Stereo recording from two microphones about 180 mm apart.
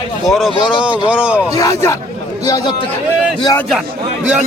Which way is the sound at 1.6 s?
15° left (ahead or behind).